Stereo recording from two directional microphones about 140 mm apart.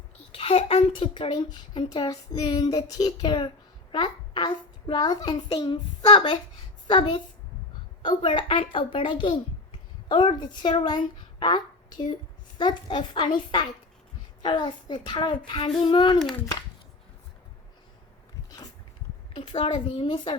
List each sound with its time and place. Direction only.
0.3 s a child's voice: 45° left (ahead or behind)
19.4 s a child's voice: 40° left (ahead or behind)